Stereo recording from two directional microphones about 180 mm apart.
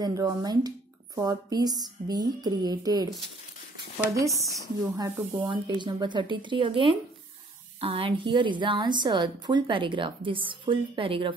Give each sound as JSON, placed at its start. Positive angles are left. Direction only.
{"t": 0.0, "sound": "a woman's voice", "side_deg": -20}
{"t": 4.3, "sound": "speech", "side_deg": 0}
{"t": 4.9, "sound": "a woman's voice", "side_deg": -20}